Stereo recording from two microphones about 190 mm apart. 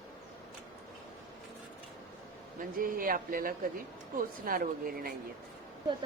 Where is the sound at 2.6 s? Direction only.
50° right (ahead or behind).